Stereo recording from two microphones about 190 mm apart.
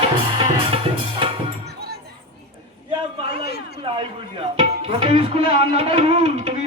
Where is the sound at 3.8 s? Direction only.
30° right (ahead or behind).